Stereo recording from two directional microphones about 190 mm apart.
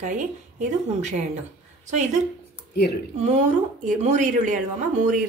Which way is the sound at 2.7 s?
60° left (ahead or behind).